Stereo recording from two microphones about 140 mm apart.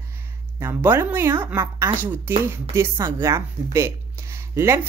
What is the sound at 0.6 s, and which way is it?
Speech, 20° right (ahead or behind).